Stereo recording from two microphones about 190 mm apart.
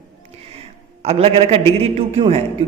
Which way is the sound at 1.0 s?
30° right (ahead or behind).